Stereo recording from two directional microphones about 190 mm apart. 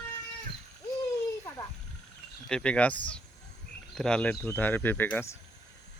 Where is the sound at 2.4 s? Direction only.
5° left (ahead or behind).